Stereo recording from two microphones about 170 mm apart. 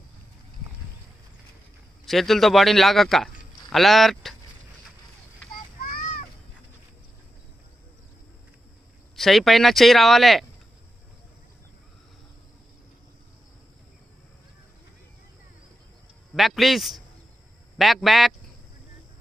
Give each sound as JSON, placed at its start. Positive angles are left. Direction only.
{"t": 2.0, "sound": "a man's voice", "side_deg": 0}
{"t": 5.8, "sound": "a sound", "side_deg": 50}
{"t": 9.1, "sound": "a man's voice", "side_deg": 0}
{"t": 16.3, "sound": "a man's voice", "side_deg": 0}